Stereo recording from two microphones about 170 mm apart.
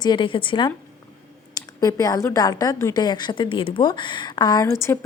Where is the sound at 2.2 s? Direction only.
20° left (ahead or behind).